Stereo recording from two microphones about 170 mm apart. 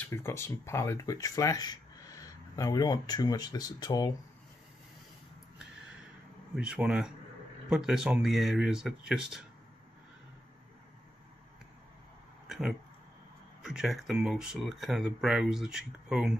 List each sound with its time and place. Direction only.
0.0 s speech: 15° left (ahead or behind)
6.5 s speech: 5° right (ahead or behind)
12.4 s a sound: centre (ahead or behind)
13.6 s speech: centre (ahead or behind)